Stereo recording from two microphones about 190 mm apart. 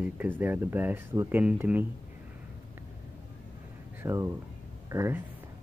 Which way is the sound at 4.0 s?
15° right (ahead or behind).